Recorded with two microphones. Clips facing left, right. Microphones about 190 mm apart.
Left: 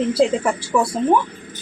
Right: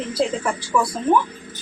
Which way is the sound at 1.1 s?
30° left (ahead or behind).